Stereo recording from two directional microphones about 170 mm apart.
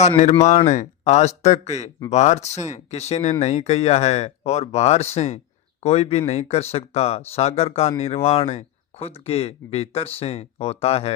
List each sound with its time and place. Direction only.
0.0 s speech: 40° left (ahead or behind)